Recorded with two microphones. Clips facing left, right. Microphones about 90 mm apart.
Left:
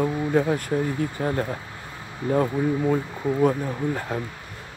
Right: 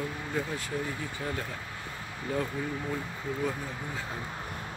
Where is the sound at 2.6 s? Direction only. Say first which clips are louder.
Left 11 dB; 40° left (ahead or behind).